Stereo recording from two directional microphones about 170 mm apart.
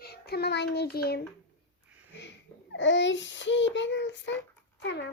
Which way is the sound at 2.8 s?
90° left.